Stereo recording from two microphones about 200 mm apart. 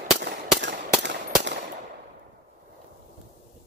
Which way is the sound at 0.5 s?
65° right (ahead or behind).